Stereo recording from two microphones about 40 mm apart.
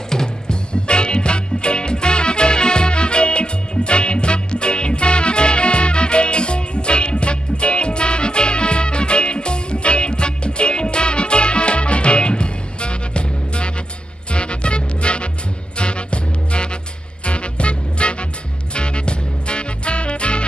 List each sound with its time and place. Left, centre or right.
0.1 s music: centre